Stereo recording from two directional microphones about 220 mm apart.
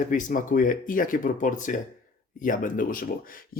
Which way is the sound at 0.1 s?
35° left (ahead or behind).